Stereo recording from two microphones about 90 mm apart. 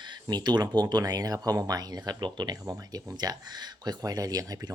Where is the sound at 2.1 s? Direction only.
55° right (ahead or behind).